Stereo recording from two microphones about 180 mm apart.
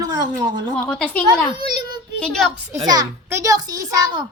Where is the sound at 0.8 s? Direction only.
5° left (ahead or behind).